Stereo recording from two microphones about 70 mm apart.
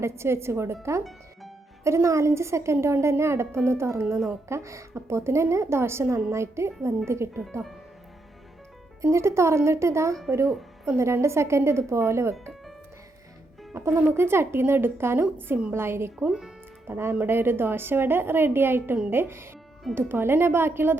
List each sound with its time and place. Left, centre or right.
0.0 s speech: right
9.0 s speech: right
13.7 s speech: right
16.1 s speech: centre
16.8 s speech: right